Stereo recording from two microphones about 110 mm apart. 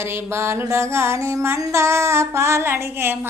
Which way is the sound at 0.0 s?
20° right (ahead or behind).